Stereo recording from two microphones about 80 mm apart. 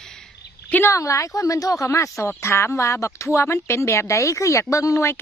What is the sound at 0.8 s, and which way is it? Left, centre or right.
Speech, left.